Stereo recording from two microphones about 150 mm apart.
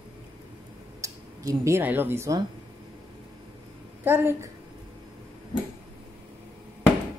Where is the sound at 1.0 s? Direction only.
20° right (ahead or behind).